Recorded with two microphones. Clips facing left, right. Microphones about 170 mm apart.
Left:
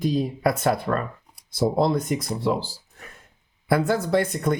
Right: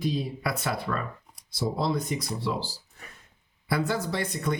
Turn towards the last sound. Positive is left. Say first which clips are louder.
# left 7 dB
turn(degrees=50)  # may be behind; listen again after turning